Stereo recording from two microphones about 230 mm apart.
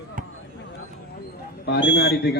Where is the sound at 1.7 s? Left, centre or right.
Left.